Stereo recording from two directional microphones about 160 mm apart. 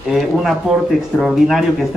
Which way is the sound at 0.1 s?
Centre (ahead or behind).